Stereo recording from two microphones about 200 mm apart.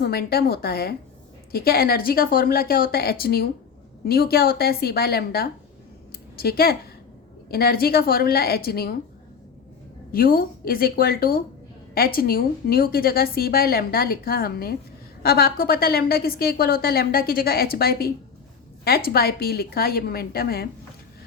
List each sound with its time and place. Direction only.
0.0 s a woman's voice: 50° left (ahead or behind)
10.1 s a woman's voice: 45° left (ahead or behind)